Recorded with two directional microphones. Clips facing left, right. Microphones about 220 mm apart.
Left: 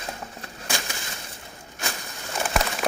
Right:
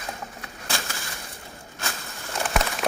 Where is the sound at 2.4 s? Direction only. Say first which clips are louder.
Even; centre (ahead or behind).